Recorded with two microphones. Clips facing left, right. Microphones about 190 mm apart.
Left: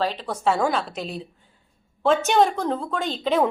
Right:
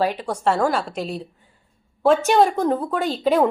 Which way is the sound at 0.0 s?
10° right (ahead or behind).